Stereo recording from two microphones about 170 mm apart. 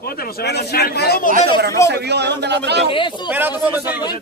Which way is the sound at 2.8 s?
30° left (ahead or behind).